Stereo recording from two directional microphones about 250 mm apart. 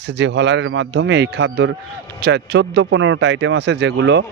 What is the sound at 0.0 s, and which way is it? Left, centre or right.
Speech, right.